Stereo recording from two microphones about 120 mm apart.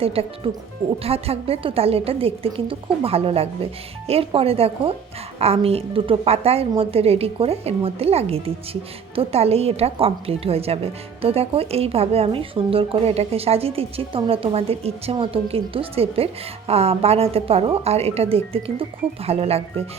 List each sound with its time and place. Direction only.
0.0 s a woman's voice: 55° right (ahead or behind)